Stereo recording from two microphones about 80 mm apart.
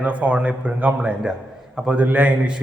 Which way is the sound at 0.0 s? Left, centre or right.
Centre.